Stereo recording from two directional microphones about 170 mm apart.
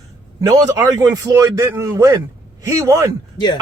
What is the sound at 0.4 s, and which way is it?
A woman's voice, 20° right (ahead or behind).